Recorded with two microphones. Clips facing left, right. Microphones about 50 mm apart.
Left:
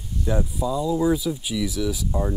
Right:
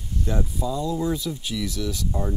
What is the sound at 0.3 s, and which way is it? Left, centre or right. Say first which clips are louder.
Speech: left 3 dB; centre.